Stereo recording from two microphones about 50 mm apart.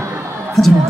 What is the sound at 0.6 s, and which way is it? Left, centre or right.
Speech, centre.